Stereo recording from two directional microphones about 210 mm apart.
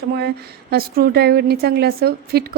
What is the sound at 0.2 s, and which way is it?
A woman's voice, 50° right (ahead or behind).